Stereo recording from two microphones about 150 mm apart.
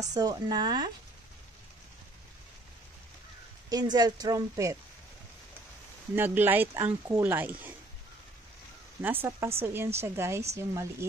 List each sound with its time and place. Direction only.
0.0 s a woman's voice: 25° right (ahead or behind)
3.7 s a woman's voice: 25° right (ahead or behind)
6.1 s speech: 15° right (ahead or behind)
9.0 s a woman's voice: 15° right (ahead or behind)